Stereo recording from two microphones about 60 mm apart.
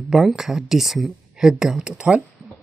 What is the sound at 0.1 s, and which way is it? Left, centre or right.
Speech, centre.